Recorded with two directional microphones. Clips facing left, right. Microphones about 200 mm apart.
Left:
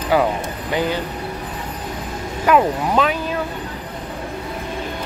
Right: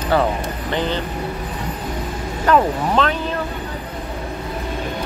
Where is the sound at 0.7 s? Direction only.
10° left (ahead or behind).